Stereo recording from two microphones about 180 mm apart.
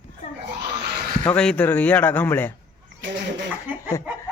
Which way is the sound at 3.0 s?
80° right.